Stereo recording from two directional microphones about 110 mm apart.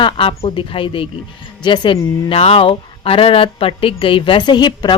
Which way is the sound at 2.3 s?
60° left (ahead or behind).